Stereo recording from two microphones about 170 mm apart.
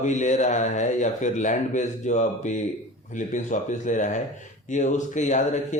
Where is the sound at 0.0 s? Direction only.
45° left (ahead or behind).